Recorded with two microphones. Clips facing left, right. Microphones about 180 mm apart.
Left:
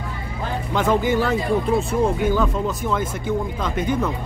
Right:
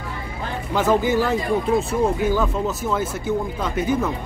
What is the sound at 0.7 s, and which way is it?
Speech, 5° right (ahead or behind).